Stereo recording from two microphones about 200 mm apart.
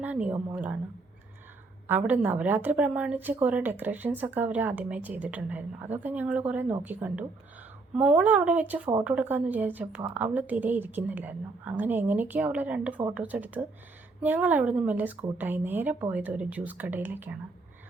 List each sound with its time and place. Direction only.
0.0 s a woman's voice: 5° right (ahead or behind)
1.9 s a woman's voice: 10° right (ahead or behind)